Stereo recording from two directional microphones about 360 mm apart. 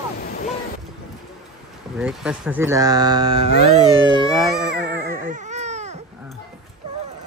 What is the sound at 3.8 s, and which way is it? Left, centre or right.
Baby cry, centre.